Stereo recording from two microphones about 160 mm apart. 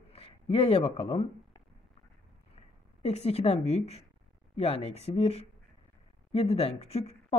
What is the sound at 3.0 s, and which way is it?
A woman's voice, 40° left (ahead or behind).